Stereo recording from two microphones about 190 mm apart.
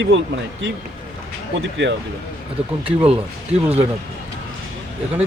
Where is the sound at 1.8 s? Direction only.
70° right (ahead or behind).